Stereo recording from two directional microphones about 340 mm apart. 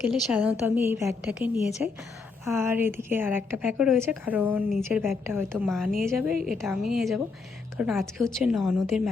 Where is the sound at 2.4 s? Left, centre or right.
Centre.